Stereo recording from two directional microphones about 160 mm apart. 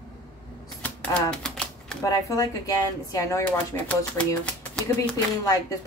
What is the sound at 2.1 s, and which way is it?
Speech, 20° left (ahead or behind).